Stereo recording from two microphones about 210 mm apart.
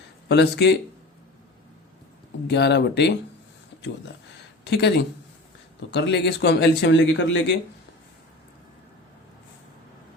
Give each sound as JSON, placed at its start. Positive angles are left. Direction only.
{"t": 0.3, "sound": "speech", "side_deg": 55}
{"t": 2.5, "sound": "speech", "side_deg": 55}
{"t": 4.6, "sound": "a man's voice", "side_deg": 55}